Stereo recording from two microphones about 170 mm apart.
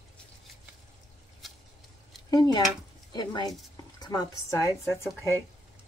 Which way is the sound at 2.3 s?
25° left (ahead or behind).